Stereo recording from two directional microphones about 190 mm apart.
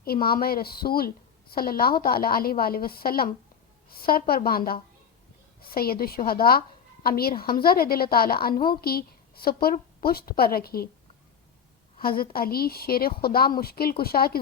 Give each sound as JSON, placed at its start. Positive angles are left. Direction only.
{"t": 0.0, "sound": "a woman's voice", "side_deg": 50}
{"t": 11.9, "sound": "a woman's voice", "side_deg": 50}